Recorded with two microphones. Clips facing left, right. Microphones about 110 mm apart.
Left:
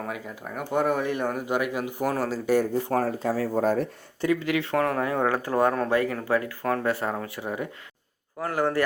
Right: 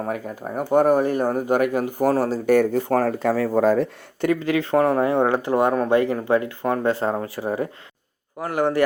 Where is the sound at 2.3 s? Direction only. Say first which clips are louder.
Right 5 dB; 60° right (ahead or behind).